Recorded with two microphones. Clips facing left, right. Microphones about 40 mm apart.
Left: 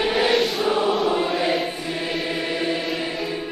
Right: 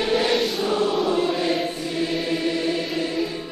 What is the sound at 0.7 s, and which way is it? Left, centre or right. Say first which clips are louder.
Choir: even; centre.